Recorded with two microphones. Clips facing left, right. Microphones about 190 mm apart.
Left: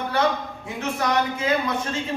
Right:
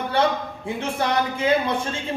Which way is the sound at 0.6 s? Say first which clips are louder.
Right 1 dB; 30° right (ahead or behind).